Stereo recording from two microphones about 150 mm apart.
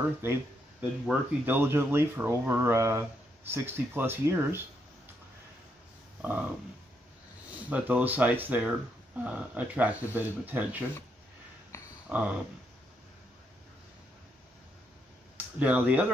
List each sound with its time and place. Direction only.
0.2 s a sound: 15° right (ahead or behind)
1.0 s speech: 10° right (ahead or behind)
7.7 s speech: 10° right (ahead or behind)
12.1 s speech: 10° right (ahead or behind)
15.3 s speech: 10° right (ahead or behind)